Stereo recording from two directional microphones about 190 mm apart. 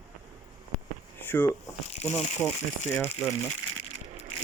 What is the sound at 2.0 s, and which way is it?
Speech, 35° left (ahead or behind).